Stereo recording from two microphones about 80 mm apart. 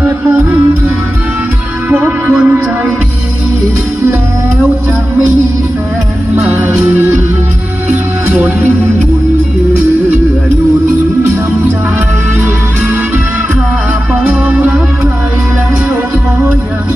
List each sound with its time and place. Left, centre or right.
0.3 s music: right
6.3 s music: right
8.3 s music: right
14.2 s music: right